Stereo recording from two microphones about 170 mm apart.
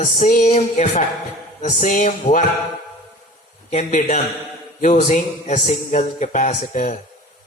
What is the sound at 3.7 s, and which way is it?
Music, 45° left (ahead or behind).